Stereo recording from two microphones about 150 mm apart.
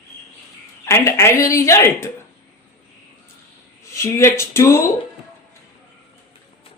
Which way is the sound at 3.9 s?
20° left (ahead or behind).